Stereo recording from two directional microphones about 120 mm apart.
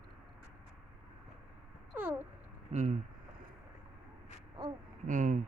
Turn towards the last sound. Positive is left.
turn(degrees=-90)